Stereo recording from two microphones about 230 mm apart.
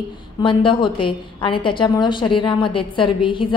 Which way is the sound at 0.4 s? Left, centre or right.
Left.